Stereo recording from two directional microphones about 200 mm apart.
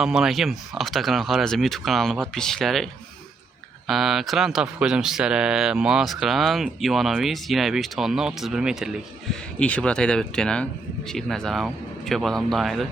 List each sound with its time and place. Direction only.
0.0 s speech: 5° right (ahead or behind)